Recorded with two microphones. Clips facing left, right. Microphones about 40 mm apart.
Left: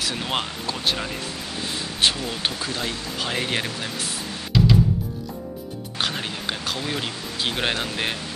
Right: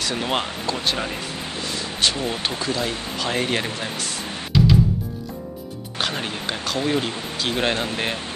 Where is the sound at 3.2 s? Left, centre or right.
Centre.